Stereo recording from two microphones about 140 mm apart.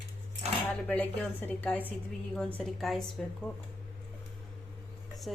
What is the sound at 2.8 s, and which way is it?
Speech, 5° left (ahead or behind).